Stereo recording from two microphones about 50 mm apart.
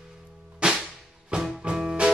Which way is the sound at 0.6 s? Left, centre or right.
Centre.